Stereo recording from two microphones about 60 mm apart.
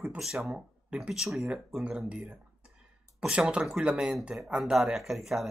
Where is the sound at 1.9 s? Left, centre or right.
Centre.